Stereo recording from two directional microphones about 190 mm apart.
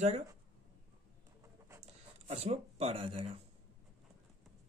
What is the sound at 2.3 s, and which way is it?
Speech, 30° right (ahead or behind).